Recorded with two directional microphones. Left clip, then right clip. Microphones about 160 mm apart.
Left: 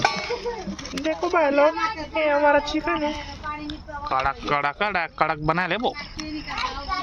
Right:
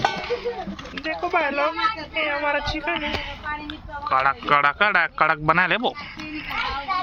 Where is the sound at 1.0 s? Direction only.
70° left (ahead or behind).